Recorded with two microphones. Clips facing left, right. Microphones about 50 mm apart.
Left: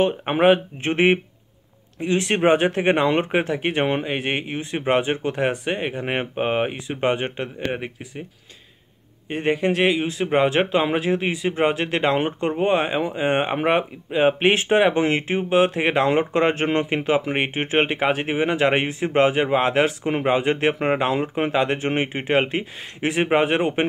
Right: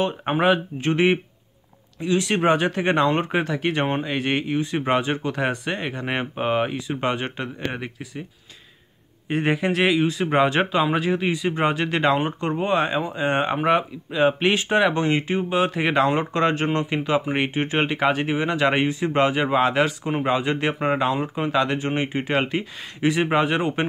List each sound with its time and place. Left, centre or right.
0.3 s speech: left
9.3 s a man's voice: centre
13.6 s speech: left; by 19.6 s centre
19.6 s speech: left